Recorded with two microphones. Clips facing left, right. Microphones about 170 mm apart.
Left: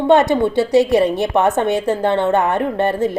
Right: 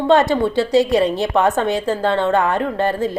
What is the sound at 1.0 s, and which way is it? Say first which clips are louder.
Speech: left 1 dB; 60° left (ahead or behind).